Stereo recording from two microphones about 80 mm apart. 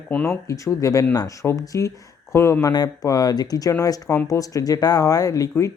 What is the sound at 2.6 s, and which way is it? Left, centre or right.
Speech, left.